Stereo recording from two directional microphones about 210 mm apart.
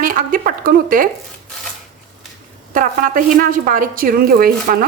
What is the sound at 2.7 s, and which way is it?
Speech, 40° right (ahead or behind).